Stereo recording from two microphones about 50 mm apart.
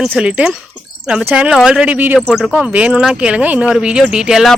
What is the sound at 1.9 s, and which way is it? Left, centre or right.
Speech, right.